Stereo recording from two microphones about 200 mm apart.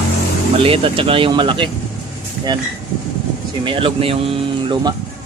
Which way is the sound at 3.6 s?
25° right (ahead or behind).